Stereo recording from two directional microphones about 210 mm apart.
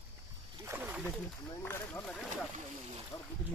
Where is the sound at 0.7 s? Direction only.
10° right (ahead or behind).